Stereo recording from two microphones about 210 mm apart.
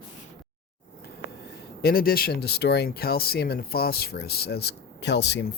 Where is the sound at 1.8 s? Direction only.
45° left (ahead or behind).